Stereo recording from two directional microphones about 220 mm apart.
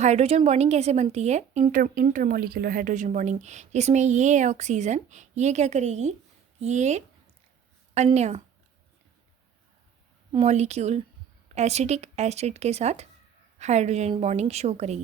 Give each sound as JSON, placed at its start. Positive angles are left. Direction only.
{"t": 0.0, "sound": "a woman's voice", "side_deg": -30}
{"t": 10.3, "sound": "a woman's voice", "side_deg": -30}